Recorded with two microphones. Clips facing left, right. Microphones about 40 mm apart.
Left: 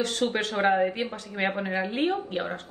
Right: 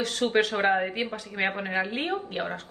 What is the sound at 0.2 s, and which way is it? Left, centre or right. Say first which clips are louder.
A woman's voice: right 2 dB; centre.